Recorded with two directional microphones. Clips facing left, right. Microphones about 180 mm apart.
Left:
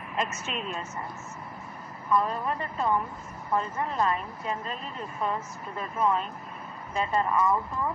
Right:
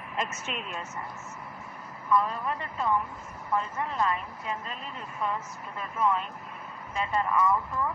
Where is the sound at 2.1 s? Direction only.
40° left (ahead or behind).